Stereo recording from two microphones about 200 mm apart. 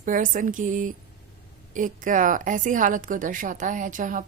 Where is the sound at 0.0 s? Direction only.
40° right (ahead or behind).